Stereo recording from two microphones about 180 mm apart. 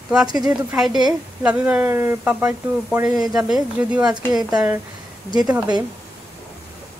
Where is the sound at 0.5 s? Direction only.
5° right (ahead or behind).